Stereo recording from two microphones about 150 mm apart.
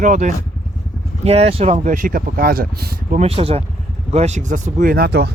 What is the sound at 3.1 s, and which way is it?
Speech, 40° right (ahead or behind).